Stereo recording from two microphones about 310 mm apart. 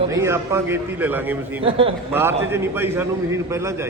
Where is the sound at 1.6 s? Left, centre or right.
Centre.